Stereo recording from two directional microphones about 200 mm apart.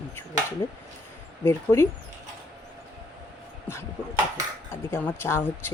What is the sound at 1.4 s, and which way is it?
Speech, 15° left (ahead or behind).